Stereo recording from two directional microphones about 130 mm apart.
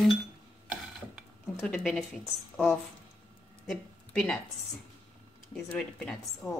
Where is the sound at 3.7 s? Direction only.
5° left (ahead or behind).